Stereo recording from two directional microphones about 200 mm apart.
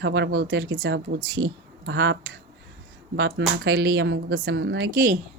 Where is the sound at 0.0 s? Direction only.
60° right (ahead or behind).